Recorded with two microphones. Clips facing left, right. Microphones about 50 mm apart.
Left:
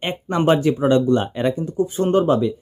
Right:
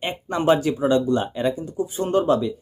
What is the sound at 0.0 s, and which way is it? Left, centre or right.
Speech, left.